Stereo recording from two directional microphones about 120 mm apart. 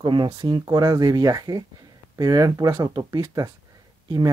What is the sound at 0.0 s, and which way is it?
Speech, 40° right (ahead or behind).